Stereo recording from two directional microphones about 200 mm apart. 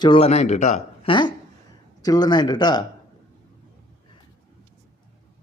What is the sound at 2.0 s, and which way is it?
Speech, 20° left (ahead or behind).